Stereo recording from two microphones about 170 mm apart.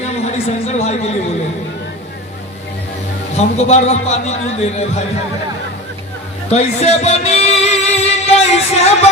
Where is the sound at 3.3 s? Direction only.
40° left (ahead or behind).